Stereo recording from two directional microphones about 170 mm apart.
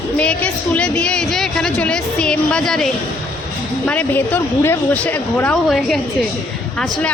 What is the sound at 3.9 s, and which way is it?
A woman's voice, 10° left (ahead or behind).